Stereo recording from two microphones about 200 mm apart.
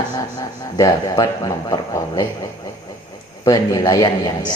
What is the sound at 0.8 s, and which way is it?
A man's voice, 15° left (ahead or behind).